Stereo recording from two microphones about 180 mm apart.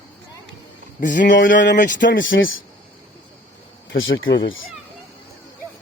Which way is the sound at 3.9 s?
90° left.